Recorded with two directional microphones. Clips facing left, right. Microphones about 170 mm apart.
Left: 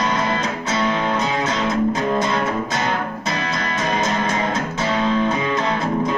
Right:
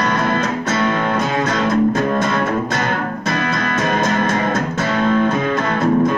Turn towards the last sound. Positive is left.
turn(degrees=-55)  # may be behind; listen again after turning